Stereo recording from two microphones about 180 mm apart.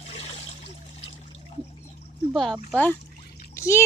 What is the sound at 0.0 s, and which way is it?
Trickle, 35° left (ahead or behind).